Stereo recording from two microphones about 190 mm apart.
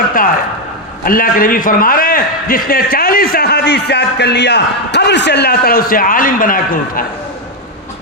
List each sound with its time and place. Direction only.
1.0 s a man's voice: 45° left (ahead or behind)